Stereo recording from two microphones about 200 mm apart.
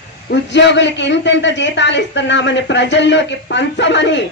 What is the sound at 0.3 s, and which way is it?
A man's voice, 60° left (ahead or behind).